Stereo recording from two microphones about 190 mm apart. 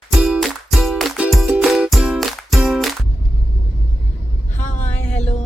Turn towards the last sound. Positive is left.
turn(degrees=35)  # may be behind; listen again after turning